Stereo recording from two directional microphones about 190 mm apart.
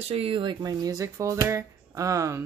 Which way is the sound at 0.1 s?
30° right (ahead or behind).